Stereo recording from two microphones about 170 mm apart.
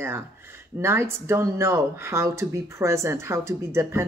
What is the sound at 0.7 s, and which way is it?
Speech, 15° right (ahead or behind).